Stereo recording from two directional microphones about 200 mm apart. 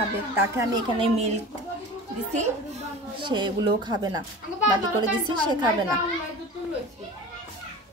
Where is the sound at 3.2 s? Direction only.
25° right (ahead or behind).